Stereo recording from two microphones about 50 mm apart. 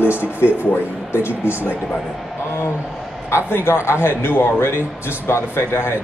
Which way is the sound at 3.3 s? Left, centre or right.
Left.